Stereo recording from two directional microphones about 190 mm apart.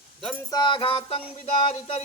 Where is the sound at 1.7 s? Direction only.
35° left (ahead or behind).